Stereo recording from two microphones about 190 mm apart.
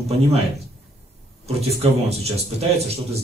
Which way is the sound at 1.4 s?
35° right (ahead or behind).